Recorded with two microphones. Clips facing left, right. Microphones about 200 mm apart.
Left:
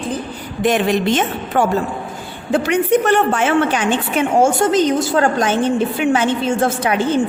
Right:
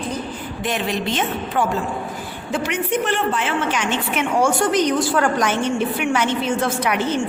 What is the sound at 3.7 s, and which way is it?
Speech, 35° left (ahead or behind).